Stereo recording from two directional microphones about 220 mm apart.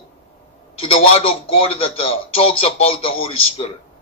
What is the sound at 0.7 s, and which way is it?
A man's voice, 25° left (ahead or behind).